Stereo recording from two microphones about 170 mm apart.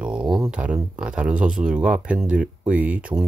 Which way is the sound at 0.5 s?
5° right (ahead or behind).